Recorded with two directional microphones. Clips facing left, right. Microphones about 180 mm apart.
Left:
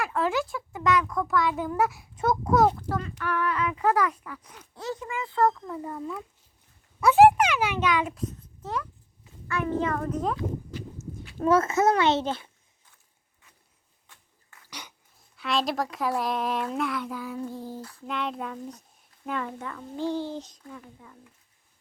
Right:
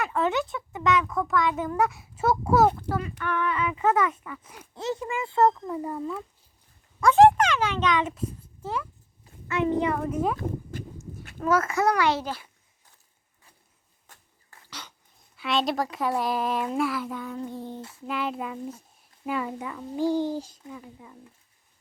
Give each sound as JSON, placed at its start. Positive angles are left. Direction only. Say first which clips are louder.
{"t": 0.0, "sound": "a child's voice", "louder": "right 1 dB", "side_deg": 0}
{"t": 4.7, "sound": "speech", "louder": "right 3 dB", "side_deg": -25}
{"t": 7.0, "sound": "a child's voice", "louder": "even", "side_deg": 10}
{"t": 9.5, "sound": "a child's voice", "louder": "right 3 dB", "side_deg": -20}
{"t": 10.3, "sound": "horse", "louder": "even", "side_deg": -50}
{"t": 11.3, "sound": "a child's voice", "louder": "left 2 dB", "side_deg": 30}
{"t": 14.1, "sound": "a sound", "louder": "right 3 dB", "side_deg": -45}
{"t": 14.7, "sound": "dog", "louder": "even", "side_deg": 15}
{"t": 15.4, "sound": "a child's voice", "louder": "right 1 dB", "side_deg": 0}
{"t": 17.7, "sound": "speech", "louder": "even", "side_deg": -25}
{"t": 18.0, "sound": "a child's voice", "louder": "right 2 dB", "side_deg": -5}